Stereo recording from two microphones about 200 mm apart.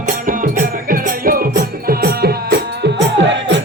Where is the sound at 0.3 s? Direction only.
45° right (ahead or behind).